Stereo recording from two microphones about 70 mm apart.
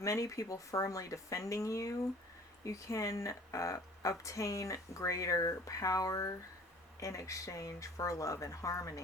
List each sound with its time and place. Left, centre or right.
0.0 s speech: left